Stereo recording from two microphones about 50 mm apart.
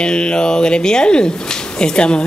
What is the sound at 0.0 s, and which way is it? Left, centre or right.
Speech, centre.